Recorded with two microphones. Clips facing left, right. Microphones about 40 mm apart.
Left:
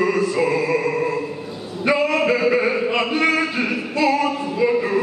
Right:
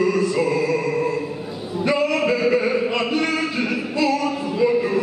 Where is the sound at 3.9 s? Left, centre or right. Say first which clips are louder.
Left 3 dB; left.